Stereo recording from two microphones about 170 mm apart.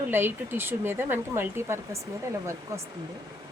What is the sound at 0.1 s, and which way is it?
Speech, 15° right (ahead or behind).